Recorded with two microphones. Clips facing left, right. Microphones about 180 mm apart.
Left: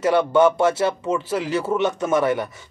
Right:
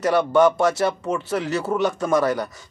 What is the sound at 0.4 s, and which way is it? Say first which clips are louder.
Speech: even; 25° left (ahead or behind).